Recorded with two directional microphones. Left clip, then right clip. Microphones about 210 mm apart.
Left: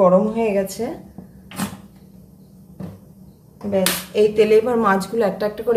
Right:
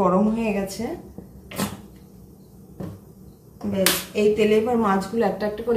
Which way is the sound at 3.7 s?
50° left (ahead or behind).